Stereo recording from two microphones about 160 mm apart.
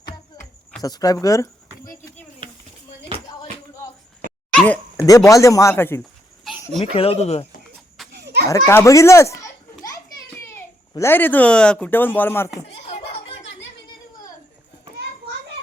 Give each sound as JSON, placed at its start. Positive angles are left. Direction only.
{"t": 0.8, "sound": "speech", "side_deg": 25}
{"t": 4.5, "sound": "dog", "side_deg": 10}
{"t": 5.0, "sound": "speech", "side_deg": 20}
{"t": 6.0, "sound": "a sound", "side_deg": 0}
{"t": 6.8, "sound": "speech", "side_deg": 35}
{"t": 8.1, "sound": "children playing", "side_deg": -90}
{"t": 8.4, "sound": "a child's voice", "side_deg": 20}
{"t": 12.6, "sound": "a sound", "side_deg": 35}